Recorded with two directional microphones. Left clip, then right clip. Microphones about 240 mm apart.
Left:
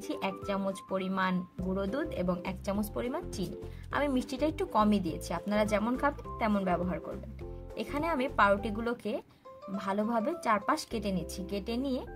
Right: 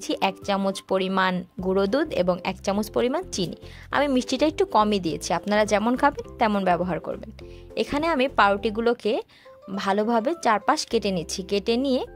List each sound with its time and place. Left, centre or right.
0.0 s speech: right